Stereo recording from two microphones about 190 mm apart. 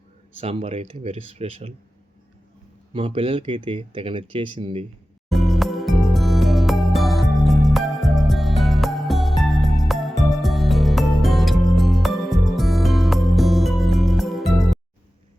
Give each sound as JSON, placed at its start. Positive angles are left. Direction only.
{"t": 0.3, "sound": "speech", "side_deg": -30}
{"t": 2.9, "sound": "speech", "side_deg": -25}
{"t": 5.3, "sound": "music", "side_deg": 0}